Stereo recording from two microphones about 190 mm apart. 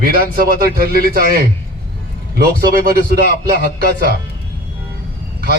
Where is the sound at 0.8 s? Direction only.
55° right (ahead or behind).